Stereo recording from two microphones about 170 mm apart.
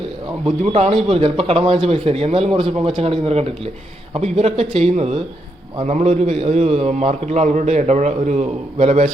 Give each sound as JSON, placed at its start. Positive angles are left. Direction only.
{"t": 0.6, "sound": "a man's voice", "side_deg": -35}